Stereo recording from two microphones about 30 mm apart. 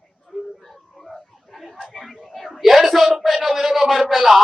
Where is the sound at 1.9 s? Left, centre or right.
Centre.